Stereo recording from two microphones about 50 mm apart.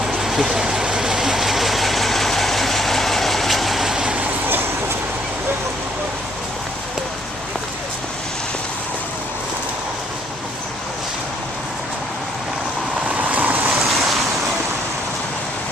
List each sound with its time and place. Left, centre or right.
0.0 s vehicle: centre
3.9 s vehicle: centre
13.1 s waves: right